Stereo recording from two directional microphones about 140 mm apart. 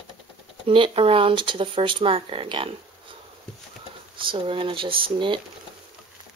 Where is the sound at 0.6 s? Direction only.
40° right (ahead or behind).